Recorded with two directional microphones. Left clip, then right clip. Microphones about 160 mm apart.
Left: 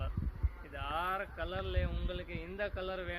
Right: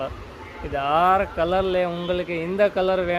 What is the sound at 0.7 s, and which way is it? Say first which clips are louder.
Speech: right 18 dB; 20° right (ahead or behind).